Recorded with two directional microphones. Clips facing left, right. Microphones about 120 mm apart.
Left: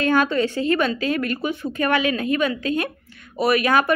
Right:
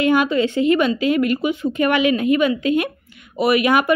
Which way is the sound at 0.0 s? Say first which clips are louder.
Right 3 dB; 15° right (ahead or behind).